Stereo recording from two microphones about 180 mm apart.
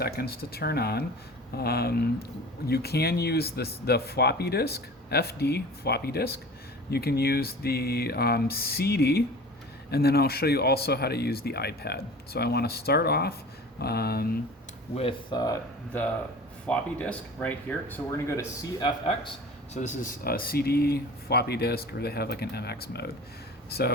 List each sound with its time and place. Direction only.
0.0 s speech: 60° left (ahead or behind)
14.9 s speech: 25° left (ahead or behind)
16.6 s speech: 5° left (ahead or behind); by 19.3 s 25° left (ahead or behind)
19.7 s speech: 45° left (ahead or behind); by 23.9 s 60° left (ahead or behind)